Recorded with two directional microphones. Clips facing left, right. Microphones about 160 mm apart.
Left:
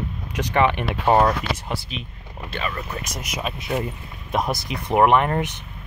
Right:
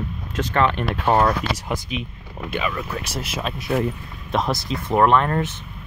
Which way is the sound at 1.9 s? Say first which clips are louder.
Right 5 dB; 10° right (ahead or behind).